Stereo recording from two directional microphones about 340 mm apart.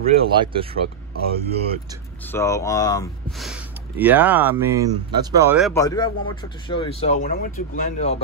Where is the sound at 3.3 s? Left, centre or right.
Centre.